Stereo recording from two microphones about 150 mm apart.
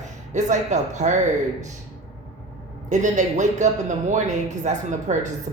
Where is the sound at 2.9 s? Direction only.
55° right (ahead or behind).